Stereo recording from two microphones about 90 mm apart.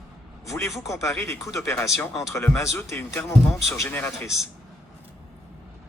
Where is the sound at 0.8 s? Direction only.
35° left (ahead or behind).